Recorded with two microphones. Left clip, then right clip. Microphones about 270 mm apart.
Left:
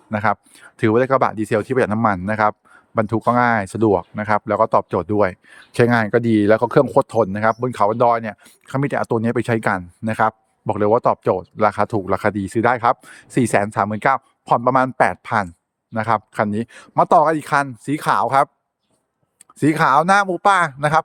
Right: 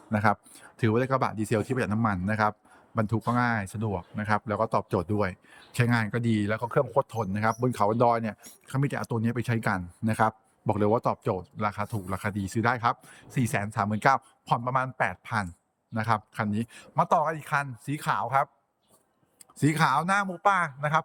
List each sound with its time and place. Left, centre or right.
0.1 s speech: centre
19.5 s speech: centre